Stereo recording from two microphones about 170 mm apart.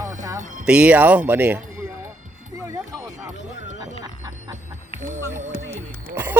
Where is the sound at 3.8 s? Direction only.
25° right (ahead or behind).